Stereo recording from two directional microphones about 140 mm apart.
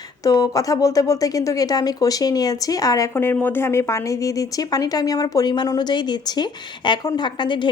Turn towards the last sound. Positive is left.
turn(degrees=35)  # may be behind; listen again after turning